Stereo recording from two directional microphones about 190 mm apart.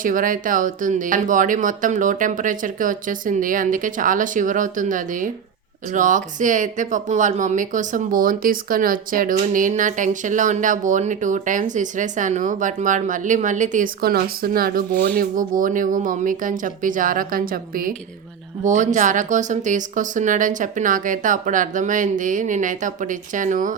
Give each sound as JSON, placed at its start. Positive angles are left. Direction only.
{"t": 0.0, "sound": "speech", "side_deg": -45}